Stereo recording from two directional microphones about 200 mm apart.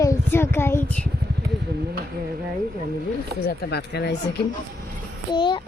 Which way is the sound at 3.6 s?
55° left (ahead or behind).